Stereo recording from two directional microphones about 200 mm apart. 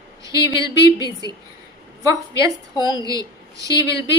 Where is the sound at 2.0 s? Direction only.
15° right (ahead or behind).